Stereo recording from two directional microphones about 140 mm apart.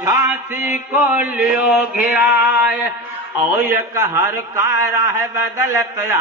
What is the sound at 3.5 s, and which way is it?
A man's voice, 15° right (ahead or behind).